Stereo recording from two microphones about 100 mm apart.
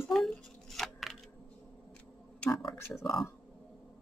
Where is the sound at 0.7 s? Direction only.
Centre (ahead or behind).